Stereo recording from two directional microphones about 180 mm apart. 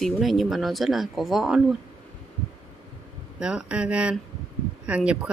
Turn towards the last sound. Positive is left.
turn(degrees=-5)  # may be behind; listen again after turning